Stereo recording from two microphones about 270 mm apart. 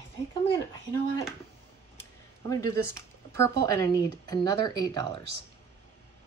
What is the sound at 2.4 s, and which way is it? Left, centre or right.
Speech, centre.